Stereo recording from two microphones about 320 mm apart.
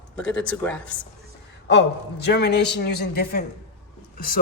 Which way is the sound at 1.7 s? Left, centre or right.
Left.